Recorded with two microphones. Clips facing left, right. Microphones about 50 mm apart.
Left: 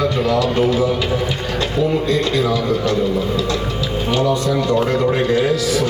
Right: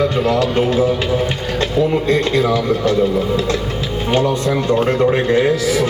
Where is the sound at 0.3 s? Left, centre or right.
Right.